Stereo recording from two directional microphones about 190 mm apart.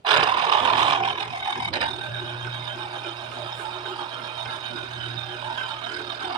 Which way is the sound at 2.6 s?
25° right (ahead or behind).